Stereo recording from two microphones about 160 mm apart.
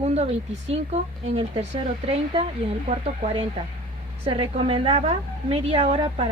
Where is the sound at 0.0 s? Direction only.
40° right (ahead or behind).